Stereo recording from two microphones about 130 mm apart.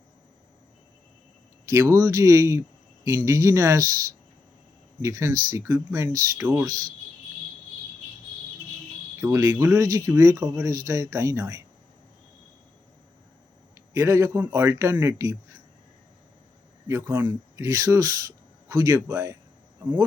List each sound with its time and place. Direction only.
1.6 s speech: 20° right (ahead or behind)
5.0 s speech: 25° right (ahead or behind)
9.2 s speech: 25° right (ahead or behind)
13.7 s speech: 20° right (ahead or behind)
16.9 s speech: 20° right (ahead or behind)